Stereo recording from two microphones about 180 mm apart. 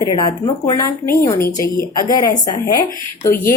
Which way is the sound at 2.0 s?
20° left (ahead or behind).